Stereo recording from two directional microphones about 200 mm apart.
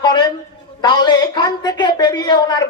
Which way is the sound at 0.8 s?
20° left (ahead or behind).